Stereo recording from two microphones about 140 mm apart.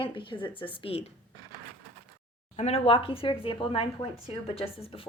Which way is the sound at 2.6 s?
45° left (ahead or behind).